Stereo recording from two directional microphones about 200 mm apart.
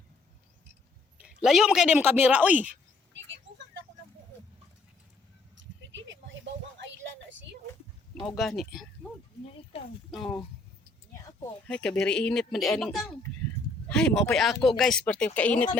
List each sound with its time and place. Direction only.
1.2 s speech: 5° right (ahead or behind)
5.5 s a sound: 65° right (ahead or behind)
8.4 s speech: centre (ahead or behind)
10.1 s speech: centre (ahead or behind)
11.7 s speech: 5° left (ahead or behind)